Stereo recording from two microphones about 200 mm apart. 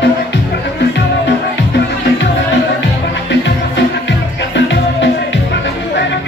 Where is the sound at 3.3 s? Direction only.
60° left (ahead or behind).